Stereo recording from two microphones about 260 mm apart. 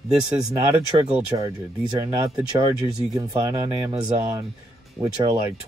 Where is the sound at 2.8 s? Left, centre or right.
Centre.